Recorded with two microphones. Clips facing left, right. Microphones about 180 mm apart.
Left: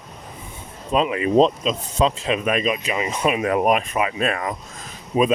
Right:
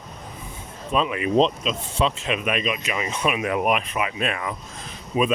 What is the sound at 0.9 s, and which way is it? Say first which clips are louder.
Speech: left 3 dB; 35° left (ahead or behind).